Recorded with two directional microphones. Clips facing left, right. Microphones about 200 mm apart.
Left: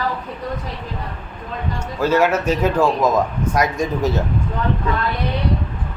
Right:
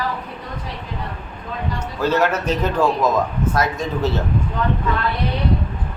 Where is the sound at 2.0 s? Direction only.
10° left (ahead or behind).